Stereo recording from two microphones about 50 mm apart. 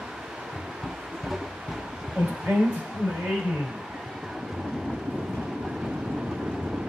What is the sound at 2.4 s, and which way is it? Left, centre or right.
Speech, centre.